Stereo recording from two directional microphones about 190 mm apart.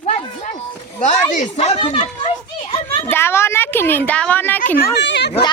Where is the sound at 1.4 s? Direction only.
35° left (ahead or behind).